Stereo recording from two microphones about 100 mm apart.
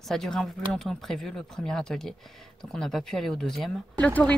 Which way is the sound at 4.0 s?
15° left (ahead or behind).